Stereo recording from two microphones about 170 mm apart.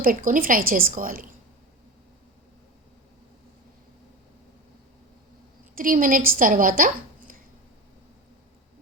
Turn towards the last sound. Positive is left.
turn(degrees=-55)  # may be behind; listen again after turning